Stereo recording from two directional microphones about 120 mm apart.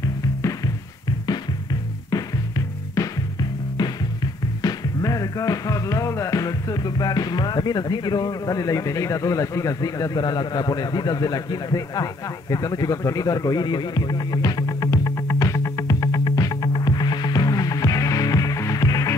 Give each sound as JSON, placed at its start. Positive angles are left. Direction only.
{"t": 2.0, "sound": "music", "side_deg": 30}
{"t": 4.6, "sound": "music", "side_deg": 30}